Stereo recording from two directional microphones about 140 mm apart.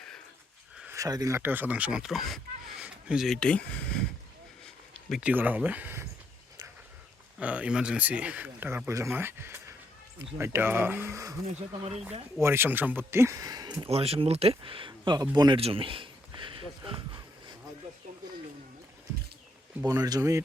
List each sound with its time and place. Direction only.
0.9 s speech: 25° right (ahead or behind)
1.4 s speech: 15° right (ahead or behind); by 4.0 s 10° left (ahead or behind)
4.6 s a sound: centre (ahead or behind)
5.3 s speech: 10° right (ahead or behind)
7.3 s speech: 10° right (ahead or behind); by 13.9 s 30° right (ahead or behind)
13.9 s speech: 45° right (ahead or behind)
15.5 s a sound: 40° right (ahead or behind)
19.8 s speech: 25° right (ahead or behind)